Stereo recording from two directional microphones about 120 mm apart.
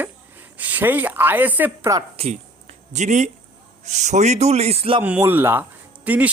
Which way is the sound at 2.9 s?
80° right.